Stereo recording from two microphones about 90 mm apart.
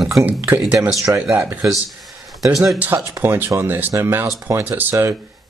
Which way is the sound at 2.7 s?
20° right (ahead or behind).